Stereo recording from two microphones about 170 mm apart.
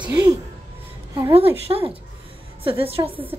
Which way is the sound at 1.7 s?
35° right (ahead or behind).